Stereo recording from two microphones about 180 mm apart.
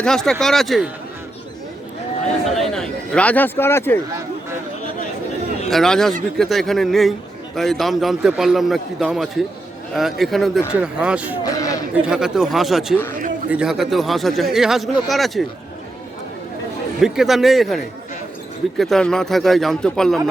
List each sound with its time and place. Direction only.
0.0 s a man's voice: 5° left (ahead or behind)
2.2 s a man's voice: 5° left (ahead or behind)
5.7 s a man's voice: centre (ahead or behind)
11.5 s a sound: 20° left (ahead or behind)
11.9 s a man's voice: 5° right (ahead or behind)
17.0 s a man's voice: centre (ahead or behind)